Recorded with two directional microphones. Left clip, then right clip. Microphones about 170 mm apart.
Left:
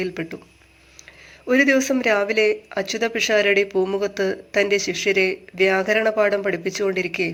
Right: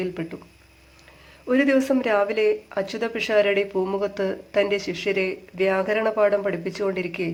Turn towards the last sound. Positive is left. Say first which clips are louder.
# left 4 dB
turn(degrees=10)  # may be behind; listen again after turning